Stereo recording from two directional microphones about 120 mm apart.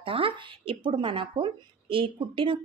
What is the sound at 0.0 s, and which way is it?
Speech, 50° right (ahead or behind).